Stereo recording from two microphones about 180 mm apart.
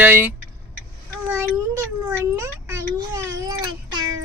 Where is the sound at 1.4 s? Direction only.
15° right (ahead or behind).